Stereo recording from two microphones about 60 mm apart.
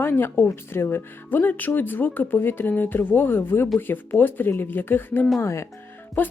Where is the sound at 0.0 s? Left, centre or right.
Left.